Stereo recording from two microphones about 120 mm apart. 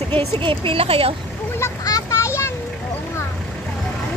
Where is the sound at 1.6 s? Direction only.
25° left (ahead or behind).